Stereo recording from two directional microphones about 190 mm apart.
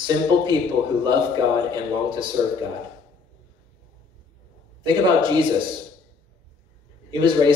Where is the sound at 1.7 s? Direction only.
25° right (ahead or behind).